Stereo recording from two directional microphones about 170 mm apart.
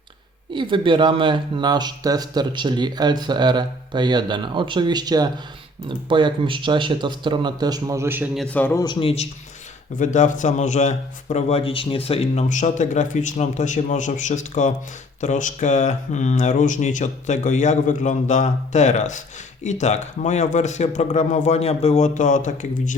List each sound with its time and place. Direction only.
0.5 s speech: 30° right (ahead or behind); by 8.3 s 15° right (ahead or behind)
8.4 s a man's voice: 10° left (ahead or behind)
8.8 s a man's voice: 30° left (ahead or behind)
10.0 s a man's voice: 45° left (ahead or behind)